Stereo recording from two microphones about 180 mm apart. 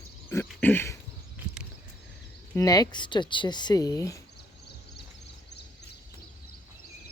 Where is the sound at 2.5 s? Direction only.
20° left (ahead or behind).